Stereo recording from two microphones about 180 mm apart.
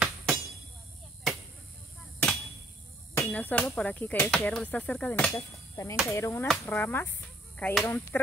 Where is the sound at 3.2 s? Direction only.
10° left (ahead or behind).